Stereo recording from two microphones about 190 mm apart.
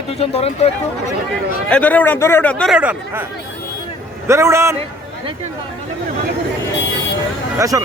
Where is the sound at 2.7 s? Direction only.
5° right (ahead or behind).